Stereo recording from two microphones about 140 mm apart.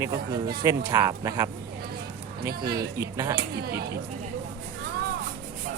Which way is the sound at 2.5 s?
90° right.